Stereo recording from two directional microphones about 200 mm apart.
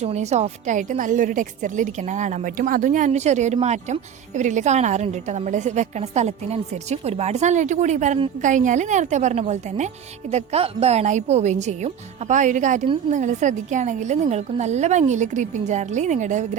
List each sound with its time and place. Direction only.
0.0 s a woman's voice: 35° right (ahead or behind)